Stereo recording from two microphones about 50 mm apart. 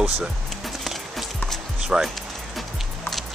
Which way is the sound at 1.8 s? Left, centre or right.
Centre.